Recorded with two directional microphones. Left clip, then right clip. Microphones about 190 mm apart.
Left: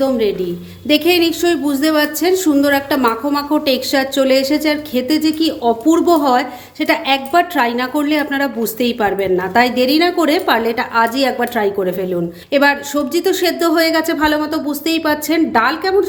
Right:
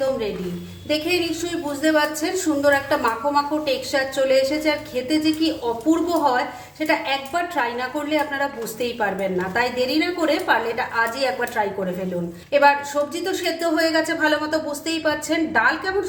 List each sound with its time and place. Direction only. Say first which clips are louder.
0.9 s speech: left 9 dB; 55° left (ahead or behind)